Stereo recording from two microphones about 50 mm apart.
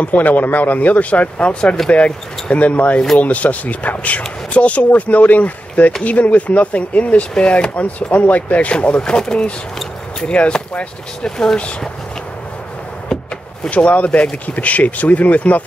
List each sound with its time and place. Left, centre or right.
0.0 s speech: left
10.2 s speech: left
11.2 s speech: centre
13.7 s speech: left